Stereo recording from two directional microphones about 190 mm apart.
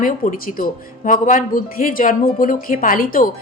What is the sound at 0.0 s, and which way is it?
Speech, 45° left (ahead or behind).